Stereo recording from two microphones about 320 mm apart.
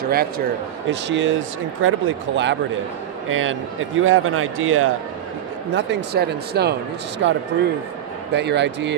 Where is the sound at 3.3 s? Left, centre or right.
Right.